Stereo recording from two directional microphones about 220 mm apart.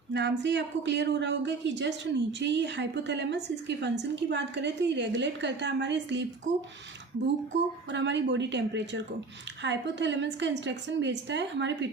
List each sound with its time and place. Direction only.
0.1 s speech: 55° right (ahead or behind)
7.9 s speech: 55° right (ahead or behind)